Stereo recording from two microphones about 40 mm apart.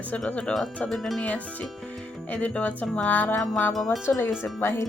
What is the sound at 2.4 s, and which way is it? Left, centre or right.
Speech, left.